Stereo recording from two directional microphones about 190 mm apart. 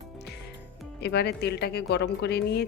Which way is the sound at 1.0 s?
60° left (ahead or behind).